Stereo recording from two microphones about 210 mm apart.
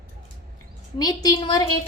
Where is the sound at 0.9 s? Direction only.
20° left (ahead or behind).